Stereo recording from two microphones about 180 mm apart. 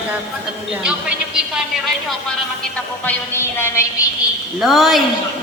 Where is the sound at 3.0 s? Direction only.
15° left (ahead or behind).